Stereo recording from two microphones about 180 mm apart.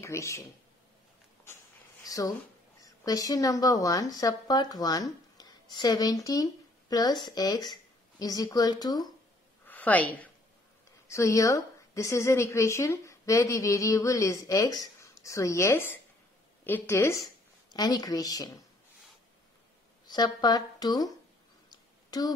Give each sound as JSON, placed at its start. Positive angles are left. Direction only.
{"t": 0.0, "sound": "speech", "side_deg": 15}
{"t": 2.0, "sound": "a woman's voice", "side_deg": 20}
{"t": 9.7, "sound": "a sound", "side_deg": 10}
{"t": 11.1, "sound": "a woman's voice", "side_deg": 15}
{"t": 20.1, "sound": "speech", "side_deg": 25}
{"t": 21.6, "sound": "a sound", "side_deg": 20}